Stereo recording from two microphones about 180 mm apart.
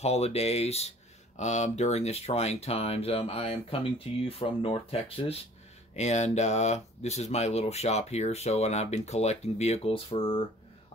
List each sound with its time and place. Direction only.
0.0 s speech: 35° left (ahead or behind)